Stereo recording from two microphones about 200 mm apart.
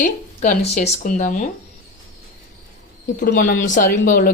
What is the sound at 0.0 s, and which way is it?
Speech, 35° left (ahead or behind).